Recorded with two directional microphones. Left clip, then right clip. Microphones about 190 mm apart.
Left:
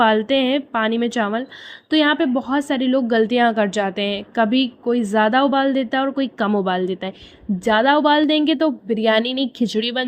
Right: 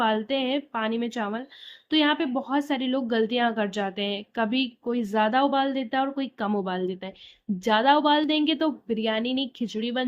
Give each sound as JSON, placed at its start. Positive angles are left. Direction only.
{"t": 0.0, "sound": "a woman's voice", "side_deg": 35}
{"t": 9.0, "sound": "a woman's voice", "side_deg": 40}